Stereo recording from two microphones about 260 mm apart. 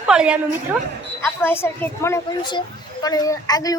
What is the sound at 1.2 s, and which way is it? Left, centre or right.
A woman's voice, centre.